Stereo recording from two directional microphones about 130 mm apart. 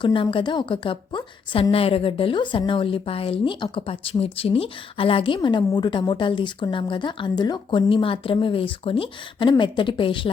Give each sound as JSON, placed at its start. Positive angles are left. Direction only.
{"t": 0.0, "sound": "speech", "side_deg": 40}